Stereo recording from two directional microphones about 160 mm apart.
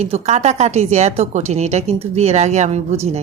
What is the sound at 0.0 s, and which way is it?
A woman's voice, 45° right (ahead or behind).